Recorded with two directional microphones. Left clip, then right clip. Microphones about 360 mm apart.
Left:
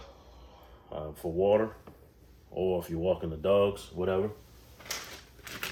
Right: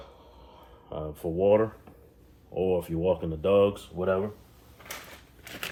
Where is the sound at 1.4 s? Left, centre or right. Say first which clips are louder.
Right 3 dB; centre.